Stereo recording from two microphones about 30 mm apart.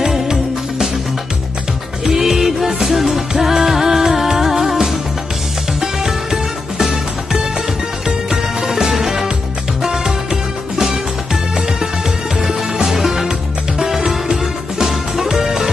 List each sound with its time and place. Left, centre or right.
0.0 s music: centre
2.0 s music: centre
5.8 s music: centre
9.8 s music: right
12.9 s music: centre